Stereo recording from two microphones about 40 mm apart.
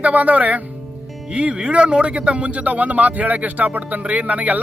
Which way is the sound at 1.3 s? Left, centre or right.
Right.